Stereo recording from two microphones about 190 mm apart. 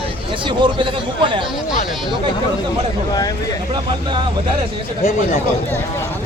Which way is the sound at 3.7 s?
25° right (ahead or behind).